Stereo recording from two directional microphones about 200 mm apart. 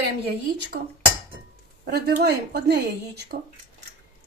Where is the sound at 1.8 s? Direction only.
55° right (ahead or behind).